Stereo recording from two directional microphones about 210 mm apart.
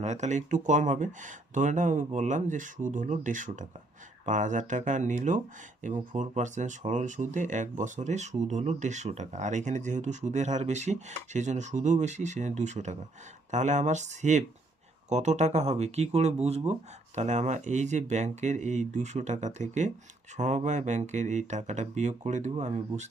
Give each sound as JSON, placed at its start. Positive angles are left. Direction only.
{"t": 0.0, "sound": "speech", "side_deg": -35}